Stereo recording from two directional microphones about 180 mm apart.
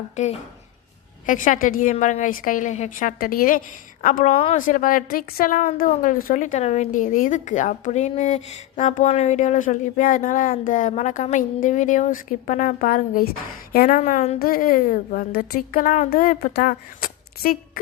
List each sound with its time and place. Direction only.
0.2 s a woman's voice: 40° left (ahead or behind)
4.5 s a woman's voice: 45° left (ahead or behind)
14.0 s a woman's voice: 40° left (ahead or behind)
14.3 s a woman's voice: 50° left (ahead or behind)